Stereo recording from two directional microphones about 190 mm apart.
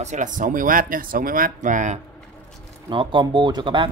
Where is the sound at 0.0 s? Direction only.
40° right (ahead or behind).